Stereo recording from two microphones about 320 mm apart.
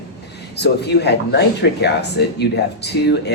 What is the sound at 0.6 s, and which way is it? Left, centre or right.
Speech, left.